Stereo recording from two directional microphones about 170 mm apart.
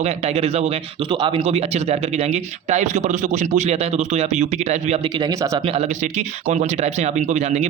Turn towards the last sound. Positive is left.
turn(degrees=-45)  # may be behind; listen again after turning